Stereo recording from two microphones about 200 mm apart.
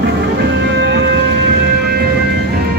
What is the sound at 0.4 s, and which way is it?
Music, 60° right (ahead or behind).